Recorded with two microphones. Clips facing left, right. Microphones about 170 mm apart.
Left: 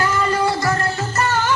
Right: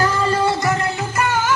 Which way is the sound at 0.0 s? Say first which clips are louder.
Right 1 dB; 30° right (ahead or behind).